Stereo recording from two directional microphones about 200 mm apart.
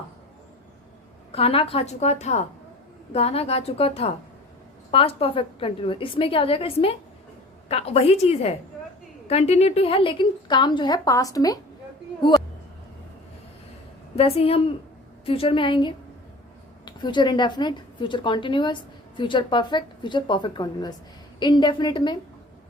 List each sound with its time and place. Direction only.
1.3 s a woman's voice: 30° left (ahead or behind)
14.2 s a woman's voice: 30° left (ahead or behind)